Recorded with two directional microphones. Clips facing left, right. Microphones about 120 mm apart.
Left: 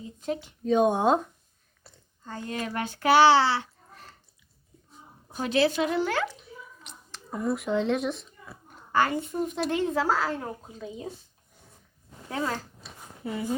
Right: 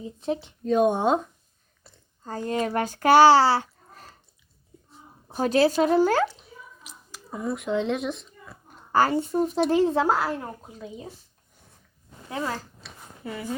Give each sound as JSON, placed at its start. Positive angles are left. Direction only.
{"t": 0.2, "sound": "speech", "side_deg": -30}
{"t": 0.6, "sound": "speech", "side_deg": 0}
{"t": 1.8, "sound": "a sound", "side_deg": 0}
{"t": 2.2, "sound": "speech", "side_deg": -40}
{"t": 5.3, "sound": "speech", "side_deg": -40}
{"t": 6.8, "sound": "speech", "side_deg": -5}
{"t": 8.9, "sound": "speech", "side_deg": -35}
{"t": 12.3, "sound": "speech", "side_deg": 0}
{"t": 13.2, "sound": "speech", "side_deg": 20}